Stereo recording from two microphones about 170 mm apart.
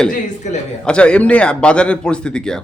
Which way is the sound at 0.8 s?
5° left (ahead or behind).